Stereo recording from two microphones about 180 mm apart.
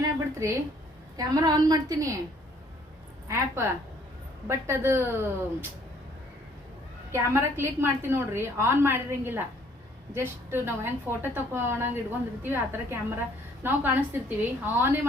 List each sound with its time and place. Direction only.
0.0 s a sound: 15° right (ahead or behind)
1.1 s a woman's voice: 20° right (ahead or behind)
3.2 s a woman's voice: 15° right (ahead or behind)
7.1 s a woman's voice: 15° right (ahead or behind)